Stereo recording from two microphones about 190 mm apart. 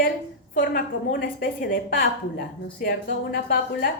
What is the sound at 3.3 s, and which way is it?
Speech, 50° left (ahead or behind).